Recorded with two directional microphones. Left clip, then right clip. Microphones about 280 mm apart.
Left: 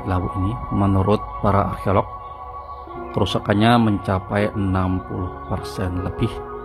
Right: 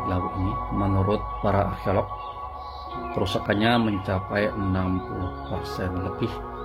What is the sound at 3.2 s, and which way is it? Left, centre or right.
Speech, centre.